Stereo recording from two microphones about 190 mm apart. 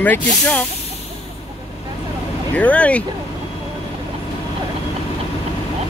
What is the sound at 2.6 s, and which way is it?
Speech, 5° left (ahead or behind).